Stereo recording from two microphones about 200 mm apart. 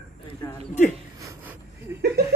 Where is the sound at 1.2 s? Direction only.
10° right (ahead or behind).